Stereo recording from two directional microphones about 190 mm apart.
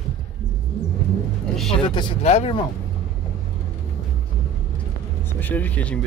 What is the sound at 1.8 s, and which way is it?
Speech, 25° left (ahead or behind).